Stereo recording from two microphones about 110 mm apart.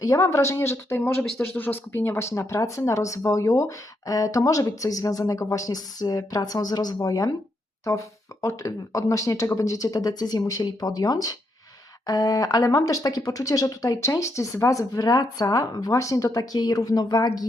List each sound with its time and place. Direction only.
0.0 s speech: 30° left (ahead or behind)